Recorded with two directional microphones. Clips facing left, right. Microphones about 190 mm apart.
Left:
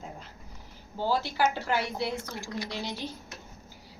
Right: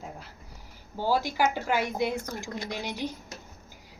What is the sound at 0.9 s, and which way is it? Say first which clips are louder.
A woman's voice: right 2 dB; 10° right (ahead or behind).